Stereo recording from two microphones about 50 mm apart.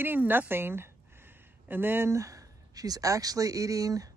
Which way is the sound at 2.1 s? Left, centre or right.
Right.